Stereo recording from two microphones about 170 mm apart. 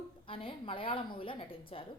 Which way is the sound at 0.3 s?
30° left (ahead or behind).